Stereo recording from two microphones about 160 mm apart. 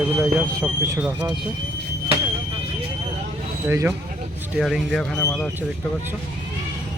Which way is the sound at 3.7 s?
15° right (ahead or behind).